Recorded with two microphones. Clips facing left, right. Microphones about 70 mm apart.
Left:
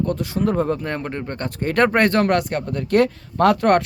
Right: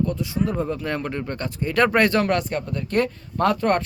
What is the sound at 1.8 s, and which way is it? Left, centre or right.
A man's voice, left.